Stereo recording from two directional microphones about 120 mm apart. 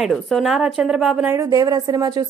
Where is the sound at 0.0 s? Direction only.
Centre (ahead or behind).